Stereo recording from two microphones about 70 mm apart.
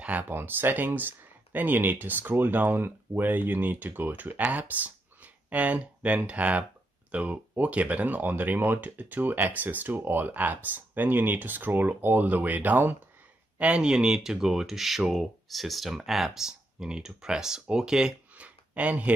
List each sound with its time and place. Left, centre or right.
0.0 s speech: right
13.6 s speech: centre